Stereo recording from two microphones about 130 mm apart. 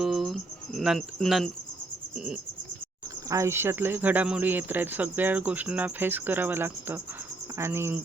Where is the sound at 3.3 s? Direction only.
20° right (ahead or behind).